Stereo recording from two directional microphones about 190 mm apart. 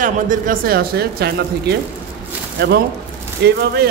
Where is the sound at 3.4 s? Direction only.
60° right (ahead or behind).